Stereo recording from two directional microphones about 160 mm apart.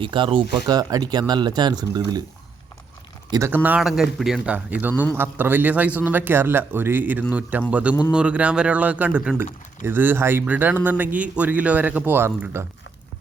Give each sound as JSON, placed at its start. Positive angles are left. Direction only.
{"t": 0.0, "sound": "speech", "side_deg": -30}
{"t": 3.3, "sound": "speech", "side_deg": -15}